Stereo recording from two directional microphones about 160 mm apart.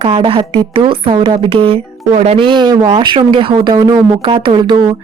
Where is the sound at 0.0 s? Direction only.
35° right (ahead or behind).